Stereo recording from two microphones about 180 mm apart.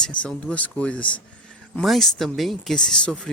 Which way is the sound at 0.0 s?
5° left (ahead or behind).